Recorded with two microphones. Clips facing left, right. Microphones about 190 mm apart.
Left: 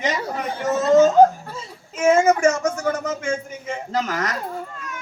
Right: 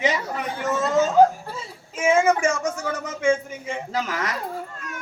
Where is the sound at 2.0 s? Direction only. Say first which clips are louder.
Left 3 dB; 40° left (ahead or behind).